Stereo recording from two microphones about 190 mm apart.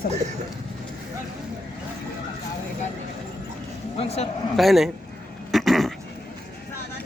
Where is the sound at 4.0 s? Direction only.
35° left (ahead or behind).